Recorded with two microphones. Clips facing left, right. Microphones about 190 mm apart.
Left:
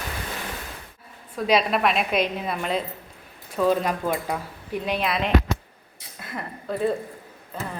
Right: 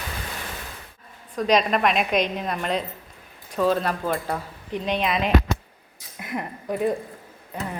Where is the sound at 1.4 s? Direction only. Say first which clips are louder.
Right 1 dB; 5° left (ahead or behind).